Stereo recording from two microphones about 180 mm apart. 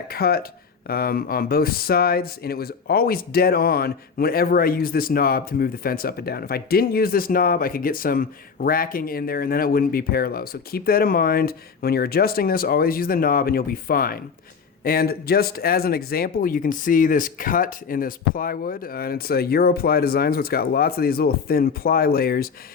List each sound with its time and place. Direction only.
0.1 s speech: 60° left (ahead or behind)